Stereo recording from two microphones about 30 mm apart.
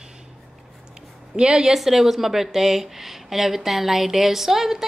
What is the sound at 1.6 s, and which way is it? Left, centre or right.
A woman's voice, centre.